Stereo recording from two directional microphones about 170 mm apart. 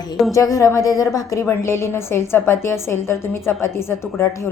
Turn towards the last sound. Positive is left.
turn(degrees=15)  # may be behind; listen again after turning